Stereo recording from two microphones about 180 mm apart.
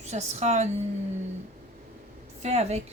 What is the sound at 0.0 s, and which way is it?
Speech, 40° right (ahead or behind).